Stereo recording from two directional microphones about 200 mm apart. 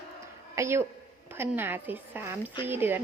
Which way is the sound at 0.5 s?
15° right (ahead or behind).